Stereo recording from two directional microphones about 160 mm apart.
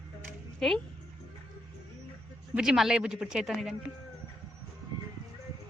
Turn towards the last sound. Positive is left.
turn(degrees=0)  # may be behind; listen again after turning